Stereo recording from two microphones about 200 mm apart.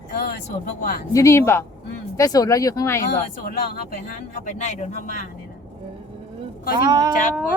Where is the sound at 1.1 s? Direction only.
15° left (ahead or behind).